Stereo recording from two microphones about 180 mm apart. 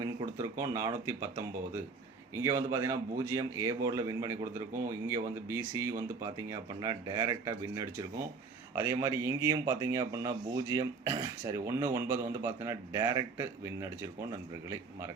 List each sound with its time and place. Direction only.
0.0 s speech: 20° right (ahead or behind)